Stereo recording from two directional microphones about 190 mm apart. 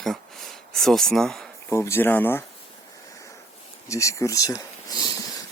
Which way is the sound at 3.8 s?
15° left (ahead or behind).